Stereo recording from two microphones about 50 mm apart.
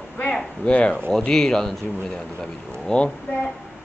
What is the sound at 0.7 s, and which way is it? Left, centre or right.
Speech, left.